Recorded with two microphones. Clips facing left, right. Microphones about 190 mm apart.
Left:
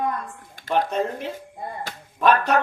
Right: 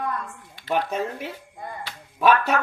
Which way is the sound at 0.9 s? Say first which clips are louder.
Left 3 dB; 5° right (ahead or behind).